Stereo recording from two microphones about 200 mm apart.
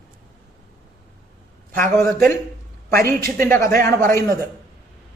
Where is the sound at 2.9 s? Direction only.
50° right (ahead or behind).